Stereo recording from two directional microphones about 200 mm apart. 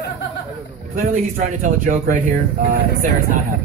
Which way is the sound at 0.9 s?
40° right (ahead or behind).